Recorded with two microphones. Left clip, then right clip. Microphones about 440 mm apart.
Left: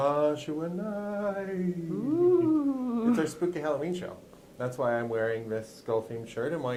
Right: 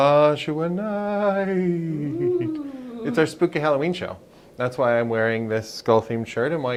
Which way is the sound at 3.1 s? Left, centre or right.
Right.